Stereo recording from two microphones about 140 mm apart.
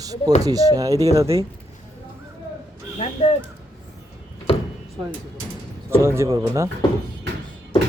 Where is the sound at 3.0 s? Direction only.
55° left (ahead or behind).